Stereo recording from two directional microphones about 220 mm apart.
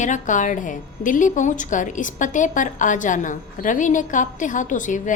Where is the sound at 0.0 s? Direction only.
35° left (ahead or behind).